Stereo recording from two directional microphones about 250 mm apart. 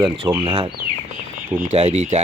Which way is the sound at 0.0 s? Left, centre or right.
Centre.